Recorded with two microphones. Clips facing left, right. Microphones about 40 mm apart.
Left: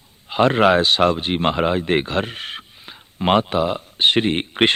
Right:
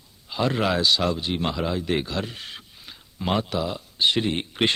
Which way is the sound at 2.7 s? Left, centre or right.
Left.